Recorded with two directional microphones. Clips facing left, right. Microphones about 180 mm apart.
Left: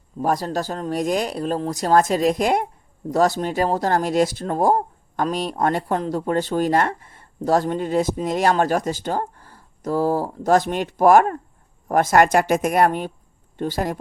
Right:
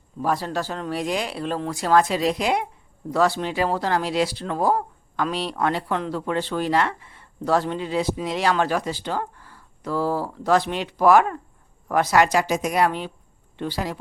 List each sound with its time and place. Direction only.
0.2 s speech: 45° left (ahead or behind)